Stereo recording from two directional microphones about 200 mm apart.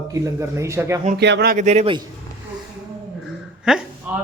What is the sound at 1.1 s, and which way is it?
Speech, 55° right (ahead or behind).